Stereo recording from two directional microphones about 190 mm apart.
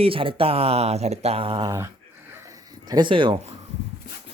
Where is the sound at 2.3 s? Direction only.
20° right (ahead or behind).